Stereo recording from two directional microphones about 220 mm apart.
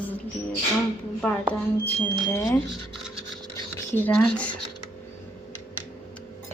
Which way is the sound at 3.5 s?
10° left (ahead or behind).